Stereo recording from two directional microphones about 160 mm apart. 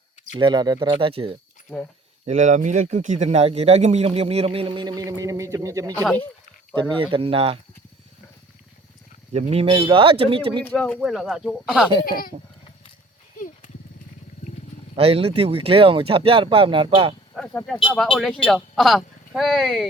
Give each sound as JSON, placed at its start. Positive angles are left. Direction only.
{"t": 0.3, "sound": "speech", "side_deg": -30}
{"t": 2.2, "sound": "speech", "side_deg": -45}
{"t": 9.3, "sound": "speech", "side_deg": -40}
{"t": 10.6, "sound": "speech", "side_deg": 5}
{"t": 14.9, "sound": "speech", "side_deg": -40}
{"t": 17.3, "sound": "a sound", "side_deg": 5}
{"t": 17.9, "sound": "speech", "side_deg": 0}